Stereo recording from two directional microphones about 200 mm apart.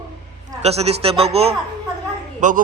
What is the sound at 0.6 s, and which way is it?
A man's voice, 30° right (ahead or behind).